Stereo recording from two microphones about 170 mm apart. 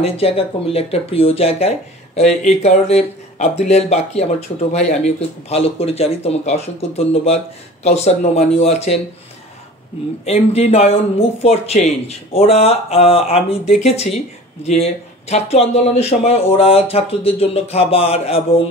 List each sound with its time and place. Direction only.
0.0 s speech: 35° left (ahead or behind)
10.2 s speech: 40° left (ahead or behind)